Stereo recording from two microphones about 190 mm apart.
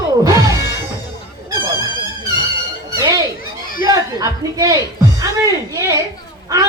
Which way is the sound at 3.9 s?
20° right (ahead or behind).